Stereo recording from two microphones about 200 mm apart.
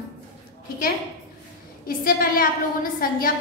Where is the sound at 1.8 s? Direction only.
45° left (ahead or behind).